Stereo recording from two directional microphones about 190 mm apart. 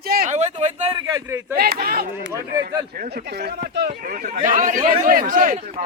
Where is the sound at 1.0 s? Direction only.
20° right (ahead or behind).